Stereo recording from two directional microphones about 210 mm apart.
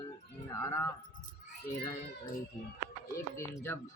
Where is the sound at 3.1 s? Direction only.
15° left (ahead or behind).